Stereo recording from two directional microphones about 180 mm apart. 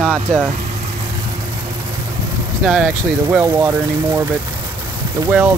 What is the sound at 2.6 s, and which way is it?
Speech, 5° right (ahead or behind).